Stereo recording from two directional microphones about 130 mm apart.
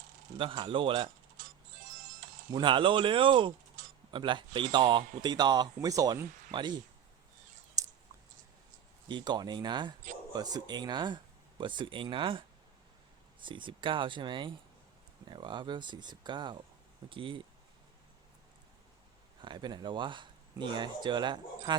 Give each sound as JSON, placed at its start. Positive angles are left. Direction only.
{"t": 0.3, "sound": "speech", "side_deg": -40}
{"t": 2.5, "sound": "speech", "side_deg": -40}
{"t": 7.8, "sound": "clicking", "side_deg": -25}
{"t": 9.0, "sound": "speech", "side_deg": -35}
{"t": 19.4, "sound": "speech", "side_deg": -35}